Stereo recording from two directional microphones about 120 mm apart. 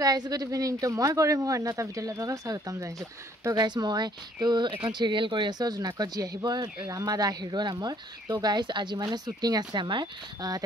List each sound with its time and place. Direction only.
0.0 s speech: 30° right (ahead or behind)